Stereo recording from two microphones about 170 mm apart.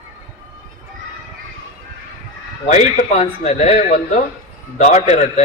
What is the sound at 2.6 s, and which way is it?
A man's voice, 40° left (ahead or behind).